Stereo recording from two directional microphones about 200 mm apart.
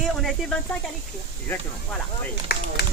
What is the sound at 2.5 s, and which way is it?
Speech, 50° left (ahead or behind).